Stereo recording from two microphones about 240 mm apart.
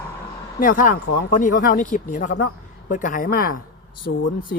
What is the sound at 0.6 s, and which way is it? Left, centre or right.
A woman's voice, left.